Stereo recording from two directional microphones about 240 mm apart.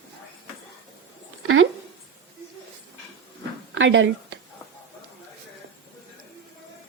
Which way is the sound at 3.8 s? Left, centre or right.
Right.